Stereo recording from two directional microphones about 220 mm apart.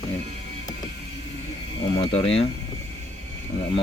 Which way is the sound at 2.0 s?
25° left (ahead or behind).